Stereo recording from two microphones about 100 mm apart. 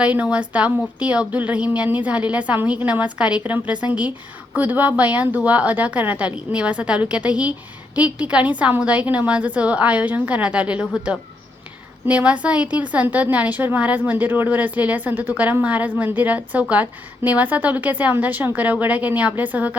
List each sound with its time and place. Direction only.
0.0 s a woman's voice: 15° right (ahead or behind)